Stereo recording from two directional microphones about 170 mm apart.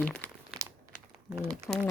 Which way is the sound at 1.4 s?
20° right (ahead or behind).